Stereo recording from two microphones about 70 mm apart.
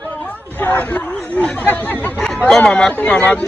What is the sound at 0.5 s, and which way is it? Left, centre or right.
Speech, left.